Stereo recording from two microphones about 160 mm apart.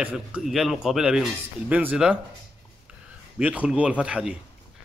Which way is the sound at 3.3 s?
10° right (ahead or behind).